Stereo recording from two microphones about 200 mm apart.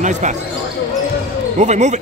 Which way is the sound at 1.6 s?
35° right (ahead or behind).